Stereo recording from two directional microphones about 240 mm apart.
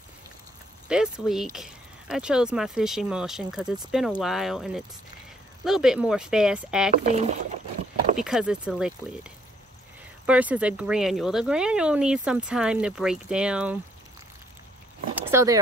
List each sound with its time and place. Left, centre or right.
0.8 s speech: centre
6.9 s speech: right
8.2 s speech: centre
15.1 s a sound: centre